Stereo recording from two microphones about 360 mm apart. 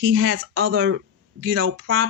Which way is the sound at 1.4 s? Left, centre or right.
Right.